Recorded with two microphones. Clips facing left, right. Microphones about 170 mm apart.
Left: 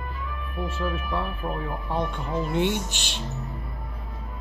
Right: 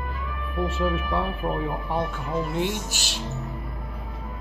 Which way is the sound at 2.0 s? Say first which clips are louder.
Left 1 dB; 5° right (ahead or behind).